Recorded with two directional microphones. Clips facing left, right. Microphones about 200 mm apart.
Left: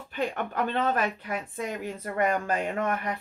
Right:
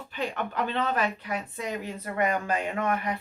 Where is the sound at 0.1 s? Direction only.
50° left (ahead or behind).